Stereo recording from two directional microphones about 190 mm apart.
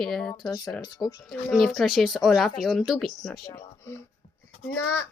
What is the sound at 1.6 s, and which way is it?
Speech, centre (ahead or behind).